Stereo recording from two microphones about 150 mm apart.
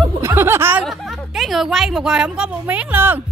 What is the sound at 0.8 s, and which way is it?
A woman's voice, centre (ahead or behind).